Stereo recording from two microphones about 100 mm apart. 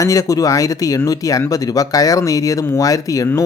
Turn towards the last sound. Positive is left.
turn(degrees=35)  # may be behind; listen again after turning